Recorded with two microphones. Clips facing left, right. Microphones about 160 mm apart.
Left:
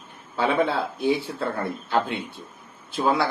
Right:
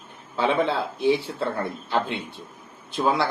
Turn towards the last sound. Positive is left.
turn(degrees=0)  # may be behind; listen again after turning